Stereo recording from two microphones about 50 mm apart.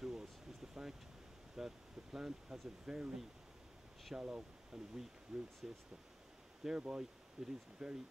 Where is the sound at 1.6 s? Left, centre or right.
Centre.